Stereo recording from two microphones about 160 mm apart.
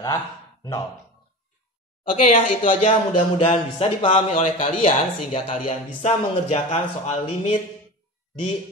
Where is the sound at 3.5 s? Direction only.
35° left (ahead or behind).